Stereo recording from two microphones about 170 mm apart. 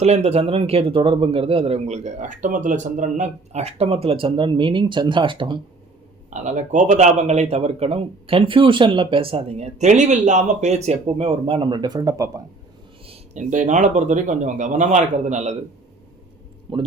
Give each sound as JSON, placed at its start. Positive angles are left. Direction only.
{"t": 0.0, "sound": "a man's voice", "side_deg": -40}
{"t": 6.3, "sound": "a man's voice", "side_deg": -45}
{"t": 13.1, "sound": "speech", "side_deg": -45}
{"t": 16.7, "sound": "a man's voice", "side_deg": -30}